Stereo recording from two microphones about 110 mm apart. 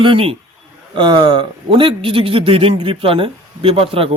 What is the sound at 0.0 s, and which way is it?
A man's voice, 55° right (ahead or behind).